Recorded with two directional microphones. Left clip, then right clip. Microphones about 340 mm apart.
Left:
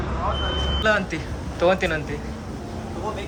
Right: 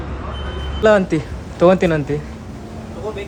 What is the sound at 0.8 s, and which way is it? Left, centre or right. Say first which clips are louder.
Speech: right 10 dB; centre.